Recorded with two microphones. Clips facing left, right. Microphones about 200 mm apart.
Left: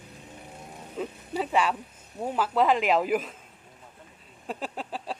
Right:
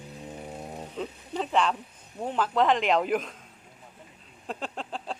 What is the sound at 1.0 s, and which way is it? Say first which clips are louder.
Speech: left 2 dB; 5° left (ahead or behind).